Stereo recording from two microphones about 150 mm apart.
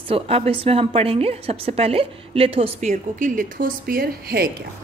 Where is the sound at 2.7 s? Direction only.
55° right (ahead or behind); by 4.5 s 90° right.